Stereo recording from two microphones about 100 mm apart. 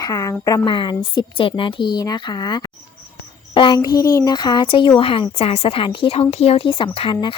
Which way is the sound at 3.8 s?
35° left (ahead or behind).